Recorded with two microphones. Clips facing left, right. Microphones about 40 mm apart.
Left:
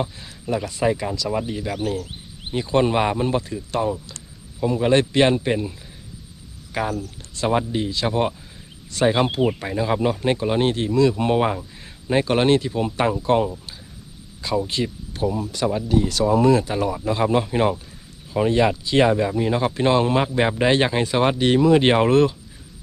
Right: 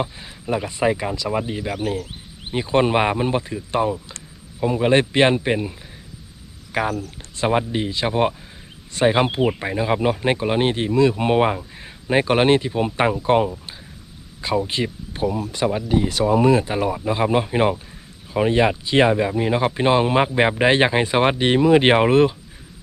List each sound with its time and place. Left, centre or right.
0.0 s speech: right
6.7 s speech: right
14.7 s speech: right